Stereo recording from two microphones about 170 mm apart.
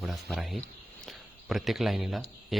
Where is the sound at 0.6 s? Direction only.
Centre (ahead or behind).